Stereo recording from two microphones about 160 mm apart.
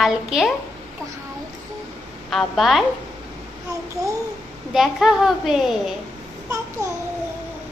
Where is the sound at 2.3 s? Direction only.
Centre (ahead or behind).